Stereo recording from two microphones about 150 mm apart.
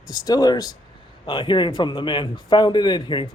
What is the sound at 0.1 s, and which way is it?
A man's voice, 25° left (ahead or behind).